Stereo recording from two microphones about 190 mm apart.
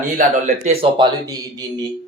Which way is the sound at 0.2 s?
40° right (ahead or behind).